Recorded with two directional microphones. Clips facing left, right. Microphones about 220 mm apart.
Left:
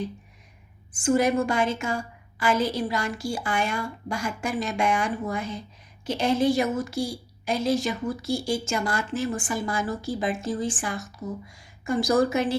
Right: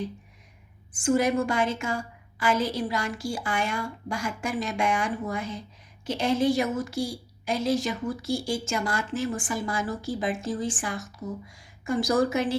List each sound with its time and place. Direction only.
0.9 s a woman's voice: 30° left (ahead or behind)